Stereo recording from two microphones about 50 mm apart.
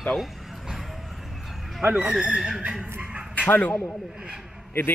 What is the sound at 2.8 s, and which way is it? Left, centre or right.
Dog, centre.